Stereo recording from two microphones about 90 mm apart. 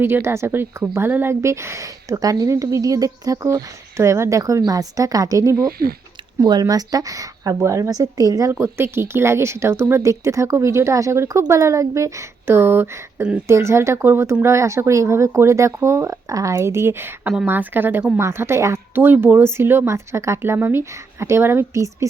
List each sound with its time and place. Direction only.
0.0 s a woman's voice: 25° right (ahead or behind)
6.4 s a woman's voice: 50° right (ahead or behind)
8.5 s a woman's voice: 25° right (ahead or behind)